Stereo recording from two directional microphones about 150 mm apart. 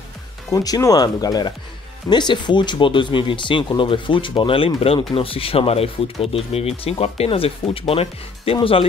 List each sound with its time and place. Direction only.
0.5 s speech: 20° left (ahead or behind); by 8.8 s 35° left (ahead or behind)